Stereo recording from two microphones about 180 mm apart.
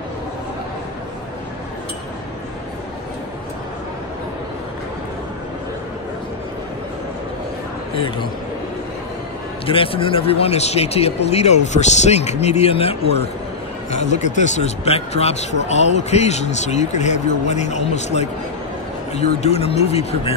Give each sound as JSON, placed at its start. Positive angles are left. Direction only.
{"t": 7.9, "sound": "a man's voice", "side_deg": 30}
{"t": 9.7, "sound": "speech", "side_deg": 30}